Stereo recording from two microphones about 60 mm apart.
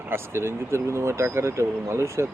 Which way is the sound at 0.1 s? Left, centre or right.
Right.